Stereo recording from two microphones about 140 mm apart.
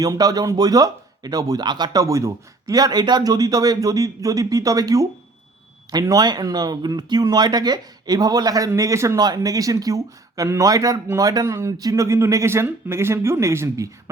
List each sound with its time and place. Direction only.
0.0 s speech: 25° right (ahead or behind)